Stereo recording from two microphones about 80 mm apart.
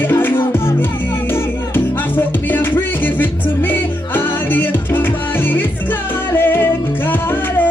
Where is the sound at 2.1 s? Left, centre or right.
Left.